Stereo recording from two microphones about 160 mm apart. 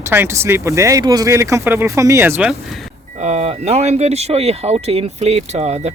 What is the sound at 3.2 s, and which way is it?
Speech, 40° right (ahead or behind).